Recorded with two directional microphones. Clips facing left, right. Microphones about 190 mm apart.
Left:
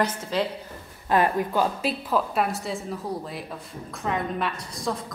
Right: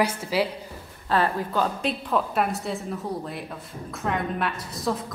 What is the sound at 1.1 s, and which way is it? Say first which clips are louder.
Speech: left 2 dB; 15° left (ahead or behind).